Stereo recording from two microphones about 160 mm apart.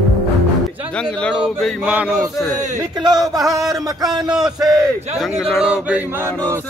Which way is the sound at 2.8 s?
25° right (ahead or behind).